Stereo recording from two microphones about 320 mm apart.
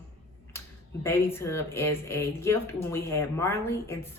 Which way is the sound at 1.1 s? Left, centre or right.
Centre.